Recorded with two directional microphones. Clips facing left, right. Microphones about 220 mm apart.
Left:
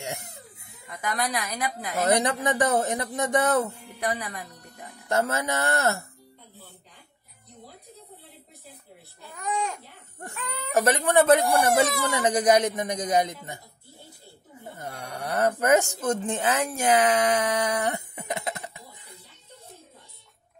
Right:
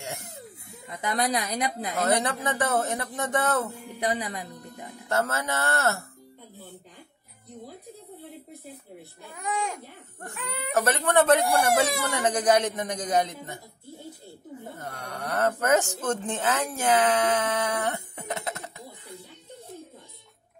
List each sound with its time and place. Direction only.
0.8 s a woman's voice: 25° right (ahead or behind)
2.0 s speech: 15° left (ahead or behind)
4.0 s speech: 20° right (ahead or behind)
5.0 s speech: 15° left (ahead or behind)
9.3 s a child's voice: 10° right (ahead or behind)
10.7 s speech: 10° left (ahead or behind)
14.8 s speech: 10° left (ahead or behind)